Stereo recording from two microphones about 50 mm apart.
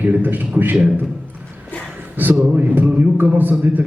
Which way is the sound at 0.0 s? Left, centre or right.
Right.